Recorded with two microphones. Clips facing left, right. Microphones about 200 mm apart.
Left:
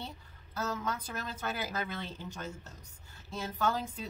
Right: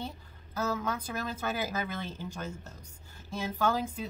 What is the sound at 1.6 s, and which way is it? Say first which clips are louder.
A woman's voice: right 3 dB; 10° right (ahead or behind).